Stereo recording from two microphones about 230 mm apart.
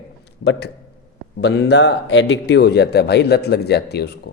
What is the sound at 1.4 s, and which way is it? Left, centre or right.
A man's voice, left.